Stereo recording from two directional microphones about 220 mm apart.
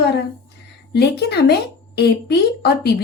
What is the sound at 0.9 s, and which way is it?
Speech, 45° left (ahead or behind).